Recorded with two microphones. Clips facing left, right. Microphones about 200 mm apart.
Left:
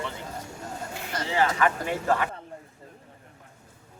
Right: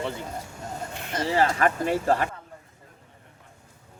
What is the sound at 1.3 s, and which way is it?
Speech, 40° right (ahead or behind).